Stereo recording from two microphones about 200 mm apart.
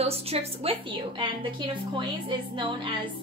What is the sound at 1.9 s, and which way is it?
Speech, 25° right (ahead or behind).